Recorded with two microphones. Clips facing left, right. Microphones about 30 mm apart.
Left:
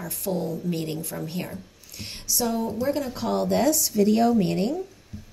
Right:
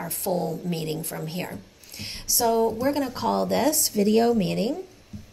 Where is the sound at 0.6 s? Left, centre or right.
Right.